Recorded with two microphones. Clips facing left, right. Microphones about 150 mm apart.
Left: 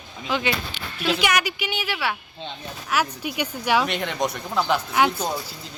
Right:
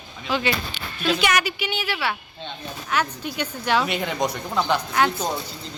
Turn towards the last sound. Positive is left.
turn(degrees=10)  # may be behind; listen again after turning